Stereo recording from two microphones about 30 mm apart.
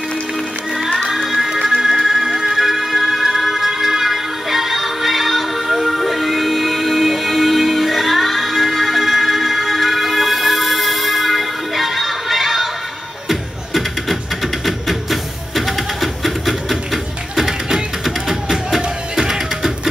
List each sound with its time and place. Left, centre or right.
0.9 s music: centre
17.5 s music: centre